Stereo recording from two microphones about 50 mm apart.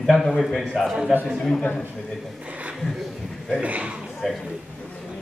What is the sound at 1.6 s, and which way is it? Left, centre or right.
Speech, left.